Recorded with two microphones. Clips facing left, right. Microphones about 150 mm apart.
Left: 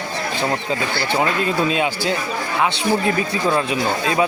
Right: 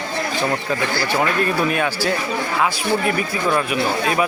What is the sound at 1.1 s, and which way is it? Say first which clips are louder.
Speech: left 1 dB; 20° left (ahead or behind).